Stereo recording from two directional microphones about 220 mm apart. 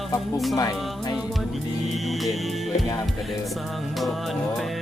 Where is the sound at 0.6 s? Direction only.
15° left (ahead or behind).